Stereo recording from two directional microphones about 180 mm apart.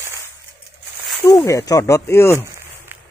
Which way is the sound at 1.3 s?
20° left (ahead or behind).